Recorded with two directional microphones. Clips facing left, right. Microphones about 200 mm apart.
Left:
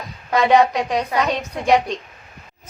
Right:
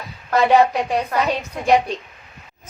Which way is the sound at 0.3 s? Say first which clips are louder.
Even; 10° right (ahead or behind).